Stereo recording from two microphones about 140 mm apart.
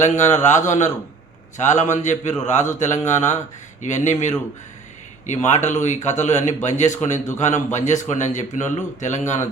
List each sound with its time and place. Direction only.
0.0 s a man's voice: 55° left (ahead or behind)